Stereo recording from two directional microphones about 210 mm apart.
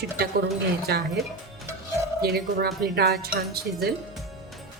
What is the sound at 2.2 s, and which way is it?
Speech, 50° right (ahead or behind).